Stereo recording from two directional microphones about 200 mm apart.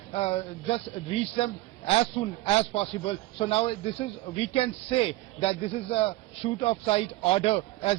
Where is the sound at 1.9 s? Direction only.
30° left (ahead or behind).